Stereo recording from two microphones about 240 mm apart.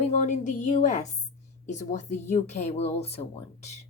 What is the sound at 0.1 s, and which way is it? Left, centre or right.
A woman's voice, left.